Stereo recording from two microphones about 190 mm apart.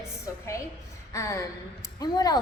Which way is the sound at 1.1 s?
15° left (ahead or behind).